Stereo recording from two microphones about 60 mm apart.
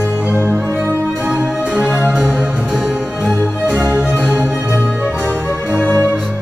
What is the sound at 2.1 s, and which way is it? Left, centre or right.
Music, centre.